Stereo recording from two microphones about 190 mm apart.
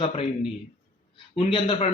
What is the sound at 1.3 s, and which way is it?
Speech, 30° left (ahead or behind).